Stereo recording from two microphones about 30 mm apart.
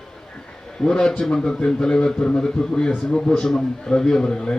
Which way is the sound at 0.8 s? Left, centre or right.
Left.